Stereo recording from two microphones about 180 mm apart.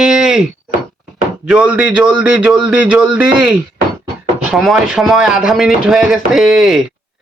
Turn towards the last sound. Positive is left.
turn(degrees=0)  # may be behind; listen again after turning